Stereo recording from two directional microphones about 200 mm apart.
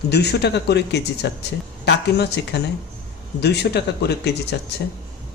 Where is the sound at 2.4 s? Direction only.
60° left (ahead or behind).